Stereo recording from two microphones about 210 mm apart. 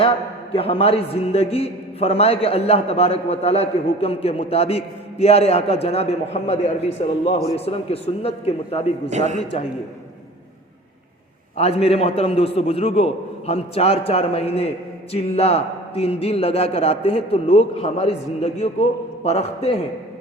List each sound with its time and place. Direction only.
0.5 s a man's voice: 25° left (ahead or behind)
9.0 s a man's voice: 35° right (ahead or behind)
11.5 s a man's voice: 30° left (ahead or behind)